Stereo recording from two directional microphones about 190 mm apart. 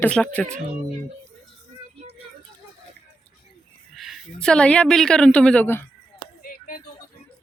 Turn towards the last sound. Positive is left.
turn(degrees=45)  # may be behind; listen again after turning